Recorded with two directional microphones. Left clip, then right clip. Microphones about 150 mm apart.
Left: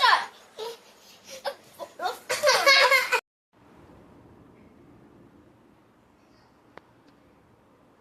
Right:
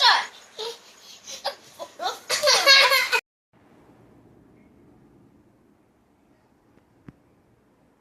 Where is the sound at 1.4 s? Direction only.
35° left (ahead or behind).